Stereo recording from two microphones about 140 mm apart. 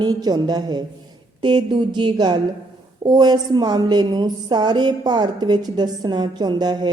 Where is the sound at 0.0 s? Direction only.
30° right (ahead or behind).